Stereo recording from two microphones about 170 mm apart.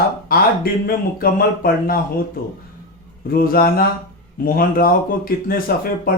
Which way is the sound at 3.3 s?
60° left (ahead or behind).